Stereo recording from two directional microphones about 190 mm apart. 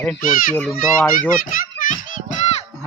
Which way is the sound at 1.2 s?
45° left (ahead or behind).